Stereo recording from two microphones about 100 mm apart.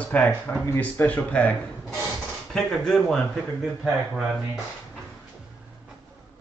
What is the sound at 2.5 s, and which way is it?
Speech, 5° left (ahead or behind).